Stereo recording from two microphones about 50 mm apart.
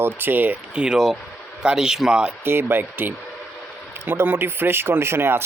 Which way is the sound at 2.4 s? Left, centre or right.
Right.